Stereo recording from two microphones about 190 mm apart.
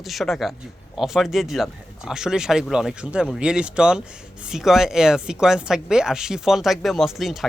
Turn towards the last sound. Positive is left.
turn(degrees=0)  # may be behind; listen again after turning